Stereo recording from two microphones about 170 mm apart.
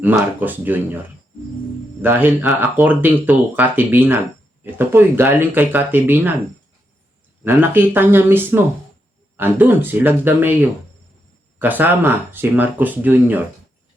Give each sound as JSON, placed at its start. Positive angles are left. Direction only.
{"t": 0.0, "sound": "speech", "side_deg": -10}
{"t": 2.0, "sound": "speech", "side_deg": -10}
{"t": 7.4, "sound": "speech", "side_deg": -10}